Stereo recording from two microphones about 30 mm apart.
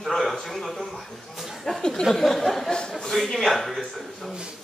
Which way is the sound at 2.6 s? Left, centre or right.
Left.